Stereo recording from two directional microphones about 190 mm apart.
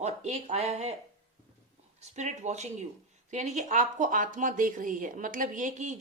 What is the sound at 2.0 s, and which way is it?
Speech, 40° right (ahead or behind).